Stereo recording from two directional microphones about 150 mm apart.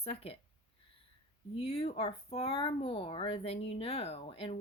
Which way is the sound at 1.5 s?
40° left (ahead or behind).